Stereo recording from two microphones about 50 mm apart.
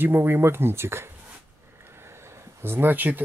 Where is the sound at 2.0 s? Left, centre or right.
Right.